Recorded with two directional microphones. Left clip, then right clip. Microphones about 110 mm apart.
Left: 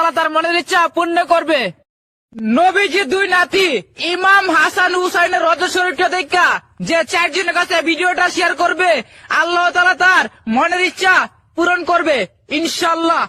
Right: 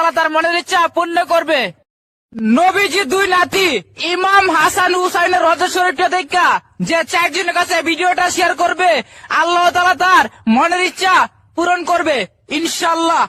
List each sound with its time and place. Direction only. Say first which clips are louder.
0.0 s speech: right 1 dB; 25° right (ahead or behind)
3.1 s speech: right 1 dB; 45° right (ahead or behind)
9.6 s speech: even; 45° right (ahead or behind)